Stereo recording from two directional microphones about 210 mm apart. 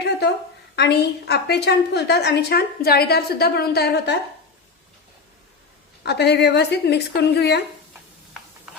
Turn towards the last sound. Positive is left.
turn(degrees=50)  # may be behind; listen again after turning